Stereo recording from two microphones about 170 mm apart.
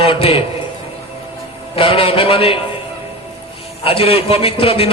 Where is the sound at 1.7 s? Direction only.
35° left (ahead or behind).